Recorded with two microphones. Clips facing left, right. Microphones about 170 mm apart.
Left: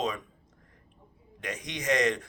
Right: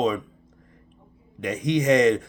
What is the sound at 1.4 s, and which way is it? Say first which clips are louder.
Speech: right 14 dB; 20° right (ahead or behind).